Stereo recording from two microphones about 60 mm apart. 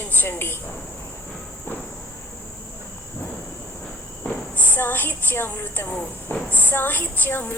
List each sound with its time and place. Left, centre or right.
0.0 s speech: left
4.5 s a woman's voice: left